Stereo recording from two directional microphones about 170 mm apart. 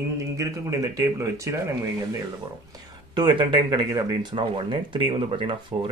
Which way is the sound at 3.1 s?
30° right (ahead or behind).